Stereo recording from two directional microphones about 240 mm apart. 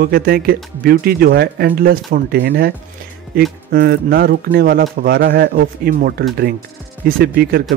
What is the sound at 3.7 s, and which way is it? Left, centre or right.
Speech, right.